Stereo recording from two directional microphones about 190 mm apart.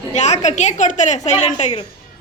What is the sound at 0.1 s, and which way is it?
A woman's voice, 35° left (ahead or behind).